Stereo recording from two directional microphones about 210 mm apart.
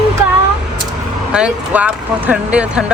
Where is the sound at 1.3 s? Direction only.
5° right (ahead or behind).